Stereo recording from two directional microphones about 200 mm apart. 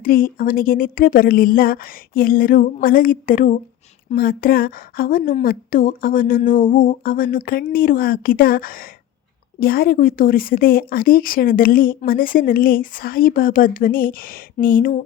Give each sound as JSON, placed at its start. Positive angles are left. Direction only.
{"t": 0.0, "sound": "speech", "side_deg": 45}